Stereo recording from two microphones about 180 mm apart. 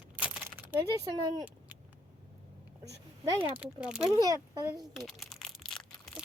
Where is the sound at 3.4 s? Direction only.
5° right (ahead or behind).